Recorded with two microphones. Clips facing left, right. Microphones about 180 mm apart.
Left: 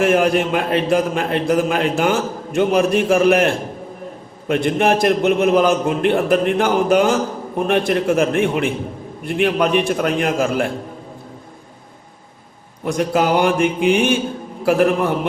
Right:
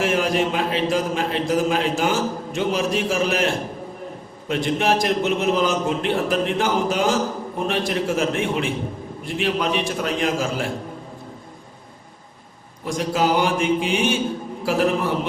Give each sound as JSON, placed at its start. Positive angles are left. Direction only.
{"t": 0.0, "sound": "a man's voice", "side_deg": 55}
{"t": 12.8, "sound": "a man's voice", "side_deg": 55}